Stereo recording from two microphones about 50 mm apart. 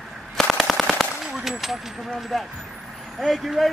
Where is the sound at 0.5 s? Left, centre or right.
Centre.